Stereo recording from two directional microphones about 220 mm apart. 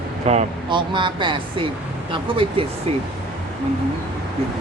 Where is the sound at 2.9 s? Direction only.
30° right (ahead or behind).